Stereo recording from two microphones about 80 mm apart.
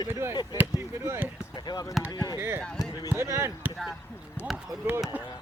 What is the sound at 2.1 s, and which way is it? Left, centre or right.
Speech, left.